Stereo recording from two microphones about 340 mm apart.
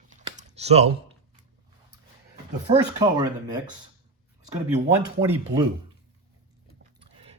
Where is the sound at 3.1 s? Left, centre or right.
Centre.